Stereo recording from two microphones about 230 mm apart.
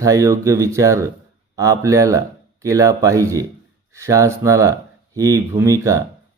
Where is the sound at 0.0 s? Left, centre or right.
Centre.